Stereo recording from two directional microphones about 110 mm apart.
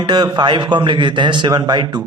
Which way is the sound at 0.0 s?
40° right (ahead or behind).